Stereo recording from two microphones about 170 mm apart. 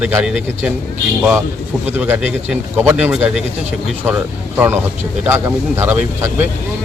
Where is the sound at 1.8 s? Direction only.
10° right (ahead or behind).